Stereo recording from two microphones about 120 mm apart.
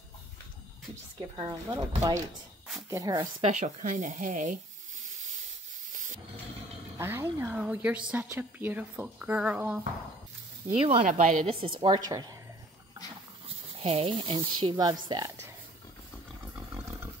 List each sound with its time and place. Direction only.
1.3 s a woman's voice: 35° right (ahead or behind)
3.4 s speech: 90° right
7.0 s a woman's voice: 20° right (ahead or behind)
10.7 s speech: 55° right (ahead or behind)
11.1 s speech: 90° right
11.4 s a woman's voice: 50° right (ahead or behind)
13.7 s speech: 55° right (ahead or behind); by 15.3 s 35° right (ahead or behind)
16.7 s roar: 25° right (ahead or behind)